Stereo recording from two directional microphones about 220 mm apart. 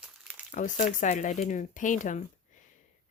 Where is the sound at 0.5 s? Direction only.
35° left (ahead or behind).